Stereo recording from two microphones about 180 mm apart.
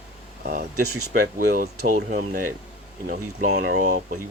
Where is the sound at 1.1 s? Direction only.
50° right (ahead or behind).